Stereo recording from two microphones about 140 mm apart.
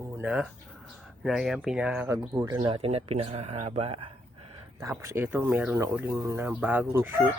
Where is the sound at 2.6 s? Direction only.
45° right (ahead or behind).